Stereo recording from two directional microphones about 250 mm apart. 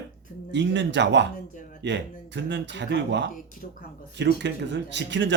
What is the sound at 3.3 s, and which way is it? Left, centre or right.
Speech, left.